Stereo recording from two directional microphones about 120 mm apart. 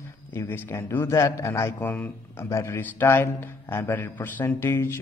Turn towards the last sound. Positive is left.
turn(degrees=20)  # may be behind; listen again after turning